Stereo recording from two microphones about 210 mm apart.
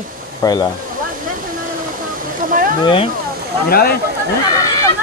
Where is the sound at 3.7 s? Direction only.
45° left (ahead or behind).